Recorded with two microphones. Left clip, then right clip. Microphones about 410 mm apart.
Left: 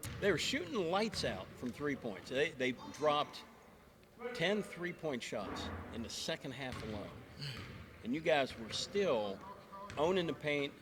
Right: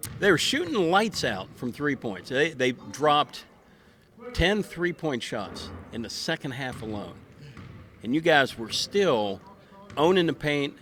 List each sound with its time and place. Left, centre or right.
0.0 s speech: right
8.0 s speech: right